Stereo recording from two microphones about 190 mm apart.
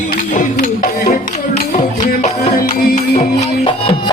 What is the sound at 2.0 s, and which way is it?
Music, 35° left (ahead or behind).